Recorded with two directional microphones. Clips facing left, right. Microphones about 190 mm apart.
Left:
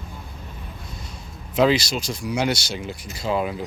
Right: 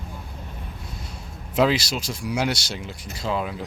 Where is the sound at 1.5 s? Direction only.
5° right (ahead or behind).